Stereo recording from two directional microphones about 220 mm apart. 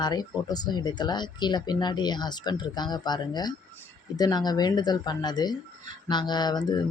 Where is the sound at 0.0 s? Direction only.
20° left (ahead or behind).